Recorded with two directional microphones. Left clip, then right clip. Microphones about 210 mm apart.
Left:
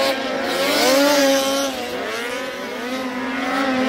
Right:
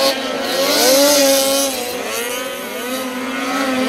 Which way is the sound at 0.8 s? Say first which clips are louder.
Right 3 dB; 35° right (ahead or behind).